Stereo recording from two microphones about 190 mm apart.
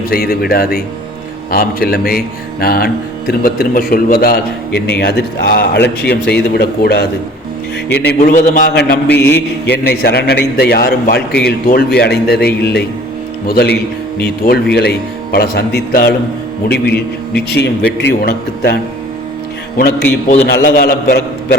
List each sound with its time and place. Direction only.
0.1 s a man's voice: 55° left (ahead or behind)
8.2 s speech: 45° left (ahead or behind)
8.7 s a man's voice: 60° left (ahead or behind)
9.1 s mantra: 10° left (ahead or behind)
9.6 s a man's voice: 60° left (ahead or behind)
20.5 s a man's voice: 50° left (ahead or behind)